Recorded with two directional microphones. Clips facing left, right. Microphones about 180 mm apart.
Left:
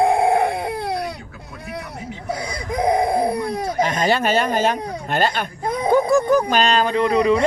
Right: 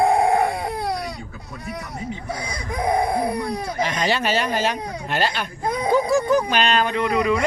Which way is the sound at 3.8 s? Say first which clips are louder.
Left 2 dB; 50° left (ahead or behind).